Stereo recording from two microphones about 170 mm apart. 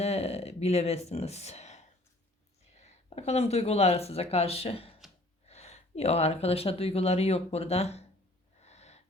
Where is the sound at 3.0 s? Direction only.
40° left (ahead or behind).